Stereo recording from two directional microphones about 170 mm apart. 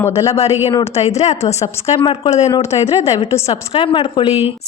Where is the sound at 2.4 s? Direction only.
20° left (ahead or behind).